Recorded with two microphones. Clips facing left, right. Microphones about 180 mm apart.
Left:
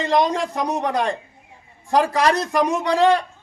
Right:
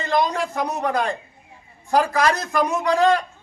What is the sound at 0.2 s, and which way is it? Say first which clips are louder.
Speech: left 2 dB; 25° left (ahead or behind).